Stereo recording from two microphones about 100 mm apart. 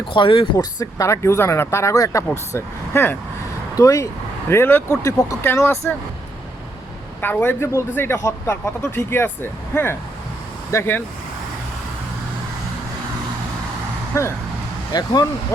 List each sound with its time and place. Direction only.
0.1 s speech: 60° left (ahead or behind)
0.6 s a man's voice: 35° left (ahead or behind)
3.8 s speech: 35° left (ahead or behind)
4.4 s a man's voice: 20° left (ahead or behind)
7.2 s a man's voice: 20° left (ahead or behind)
14.1 s a man's voice: 30° left (ahead or behind)
14.9 s speech: 40° left (ahead or behind)